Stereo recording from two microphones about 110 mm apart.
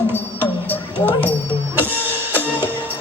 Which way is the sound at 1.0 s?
15° left (ahead or behind).